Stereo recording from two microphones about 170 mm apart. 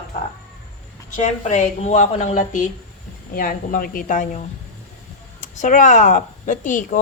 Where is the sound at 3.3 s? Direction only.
55° left (ahead or behind).